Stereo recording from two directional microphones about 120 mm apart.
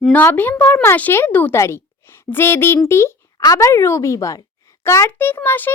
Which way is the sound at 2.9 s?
20° left (ahead or behind).